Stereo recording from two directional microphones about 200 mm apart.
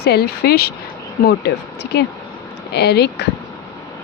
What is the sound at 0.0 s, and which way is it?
Speech, 50° left (ahead or behind).